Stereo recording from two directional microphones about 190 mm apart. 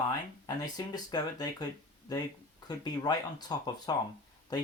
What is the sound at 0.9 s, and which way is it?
Speech, 20° left (ahead or behind).